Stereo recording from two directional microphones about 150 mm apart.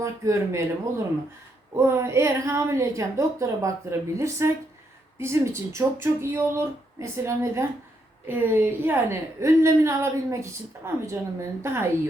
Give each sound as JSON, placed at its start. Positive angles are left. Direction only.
{"t": 0.0, "sound": "a woman's voice", "side_deg": -20}